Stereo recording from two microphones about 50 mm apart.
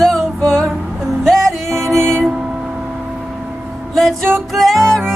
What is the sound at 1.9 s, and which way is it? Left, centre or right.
Music, centre.